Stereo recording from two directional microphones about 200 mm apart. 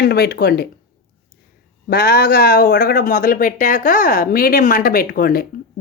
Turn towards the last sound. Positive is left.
turn(degrees=50)  # may be behind; listen again after turning